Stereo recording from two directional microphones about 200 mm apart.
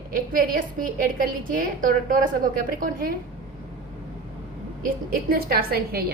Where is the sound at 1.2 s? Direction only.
45° right (ahead or behind).